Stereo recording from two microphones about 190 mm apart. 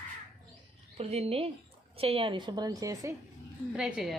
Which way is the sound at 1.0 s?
30° right (ahead or behind).